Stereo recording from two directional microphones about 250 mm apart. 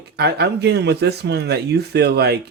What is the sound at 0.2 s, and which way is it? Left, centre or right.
Speech, right.